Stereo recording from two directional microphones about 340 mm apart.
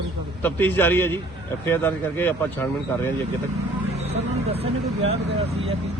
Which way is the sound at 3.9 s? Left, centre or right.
Centre.